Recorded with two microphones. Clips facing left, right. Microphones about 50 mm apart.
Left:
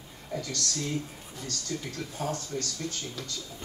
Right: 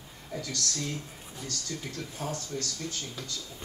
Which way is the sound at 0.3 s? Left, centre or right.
Centre.